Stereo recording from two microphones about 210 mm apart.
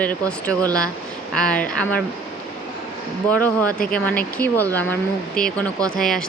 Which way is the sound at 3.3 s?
10° left (ahead or behind).